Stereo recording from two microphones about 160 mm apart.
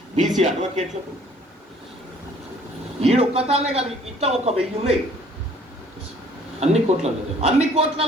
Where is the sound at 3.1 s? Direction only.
40° right (ahead or behind).